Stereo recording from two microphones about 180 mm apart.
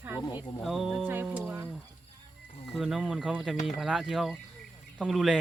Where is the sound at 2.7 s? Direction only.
Centre (ahead or behind).